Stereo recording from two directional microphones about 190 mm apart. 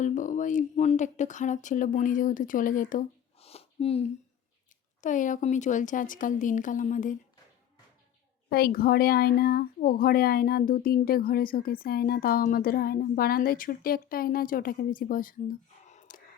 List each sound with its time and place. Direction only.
0.0 s speech: 40° left (ahead or behind)
3.3 s a sound: 30° left (ahead or behind)
4.9 s speech: 40° left (ahead or behind)
8.4 s speech: 55° left (ahead or behind)